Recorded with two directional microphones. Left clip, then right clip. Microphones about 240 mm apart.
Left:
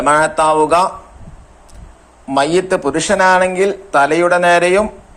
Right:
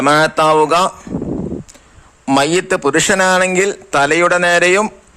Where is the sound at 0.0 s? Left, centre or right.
Right.